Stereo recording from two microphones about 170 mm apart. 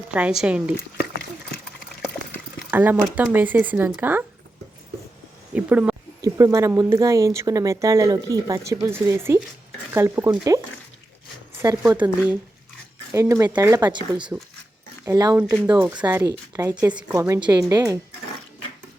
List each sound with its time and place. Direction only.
0.1 s speech: 5° right (ahead or behind)
2.6 s speech: 10° right (ahead or behind)
5.5 s a sound: 10° right (ahead or behind)
6.2 s speech: 20° right (ahead or behind)
11.8 s speech: 10° right (ahead or behind)
13.1 s speech: 15° right (ahead or behind)
14.2 s speech: 5° right (ahead or behind)
15.0 s speech: 20° right (ahead or behind)
15.7 s speech: 10° right (ahead or behind)